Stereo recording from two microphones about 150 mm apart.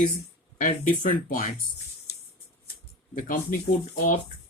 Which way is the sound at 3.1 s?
60° left (ahead or behind).